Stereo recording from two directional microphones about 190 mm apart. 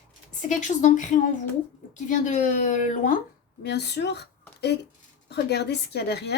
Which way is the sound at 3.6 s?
60° left (ahead or behind).